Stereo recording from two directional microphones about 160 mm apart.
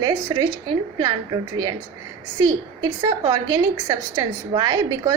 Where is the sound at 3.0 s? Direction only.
25° right (ahead or behind).